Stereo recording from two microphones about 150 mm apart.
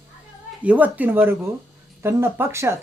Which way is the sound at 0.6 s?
10° right (ahead or behind).